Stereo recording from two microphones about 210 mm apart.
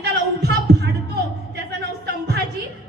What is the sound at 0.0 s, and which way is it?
Heart sounds, 55° right (ahead or behind).